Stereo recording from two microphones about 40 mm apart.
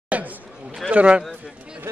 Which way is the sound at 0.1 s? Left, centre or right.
Right.